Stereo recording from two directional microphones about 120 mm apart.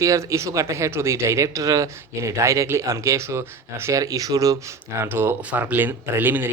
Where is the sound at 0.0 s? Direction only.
25° right (ahead or behind).